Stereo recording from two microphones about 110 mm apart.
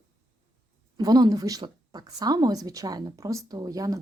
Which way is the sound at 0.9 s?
40° right (ahead or behind).